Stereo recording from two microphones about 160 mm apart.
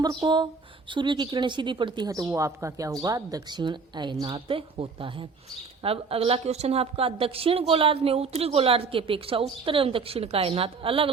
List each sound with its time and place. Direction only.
0.0 s a woman's voice: 25° right (ahead or behind)